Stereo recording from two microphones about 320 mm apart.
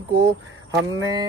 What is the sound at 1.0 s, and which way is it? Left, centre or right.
Speech, centre.